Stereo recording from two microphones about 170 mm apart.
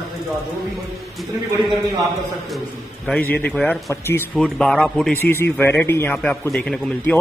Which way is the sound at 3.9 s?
15° left (ahead or behind).